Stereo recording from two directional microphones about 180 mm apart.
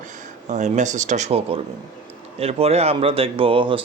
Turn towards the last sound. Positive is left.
turn(degrees=-30)  # may be behind; listen again after turning